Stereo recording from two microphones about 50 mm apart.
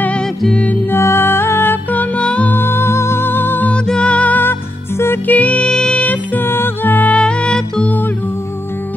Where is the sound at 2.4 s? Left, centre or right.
Left.